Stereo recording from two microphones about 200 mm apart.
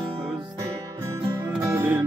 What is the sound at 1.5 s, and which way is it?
Music, 10° right (ahead or behind).